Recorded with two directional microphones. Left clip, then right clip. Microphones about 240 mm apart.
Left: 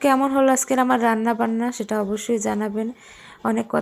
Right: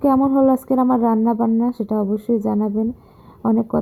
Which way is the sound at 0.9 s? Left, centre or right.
Left.